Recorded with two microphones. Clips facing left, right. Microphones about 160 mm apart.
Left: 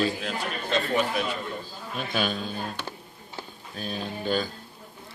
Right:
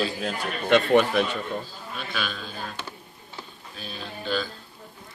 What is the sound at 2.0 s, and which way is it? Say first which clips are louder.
Speech: left 5 dB; 45° left (ahead or behind).